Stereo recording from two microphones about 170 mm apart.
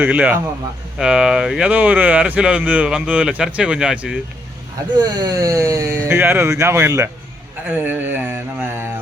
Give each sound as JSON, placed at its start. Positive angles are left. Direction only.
{"t": 0.0, "sound": "speech", "side_deg": -10}
{"t": 4.9, "sound": "speech", "side_deg": -25}